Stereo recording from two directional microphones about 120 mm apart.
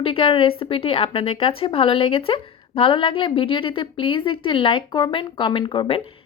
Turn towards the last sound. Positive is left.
turn(degrees=45)  # may be behind; listen again after turning